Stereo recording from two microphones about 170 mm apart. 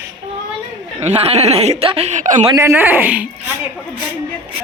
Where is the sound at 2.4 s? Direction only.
15° right (ahead or behind).